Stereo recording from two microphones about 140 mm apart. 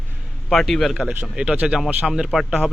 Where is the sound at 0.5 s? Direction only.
Centre (ahead or behind).